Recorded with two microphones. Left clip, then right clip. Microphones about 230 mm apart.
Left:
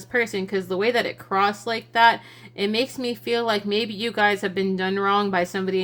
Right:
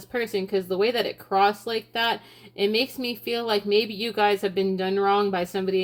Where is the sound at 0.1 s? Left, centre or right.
Left.